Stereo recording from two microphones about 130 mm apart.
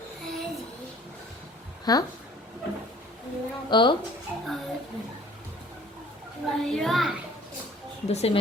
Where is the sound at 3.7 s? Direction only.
35° left (ahead or behind).